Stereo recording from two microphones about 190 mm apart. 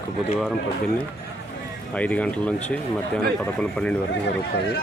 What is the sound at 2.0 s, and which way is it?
Speech, 5° left (ahead or behind).